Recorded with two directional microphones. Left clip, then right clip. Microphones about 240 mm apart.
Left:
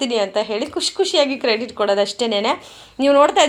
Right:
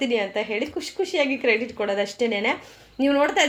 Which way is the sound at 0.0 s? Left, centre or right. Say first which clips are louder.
Left 5 dB; left.